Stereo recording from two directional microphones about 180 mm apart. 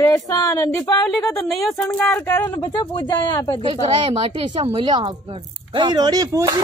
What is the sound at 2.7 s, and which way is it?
Speech, 25° left (ahead or behind).